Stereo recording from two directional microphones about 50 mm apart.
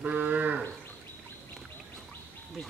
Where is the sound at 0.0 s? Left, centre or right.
Right.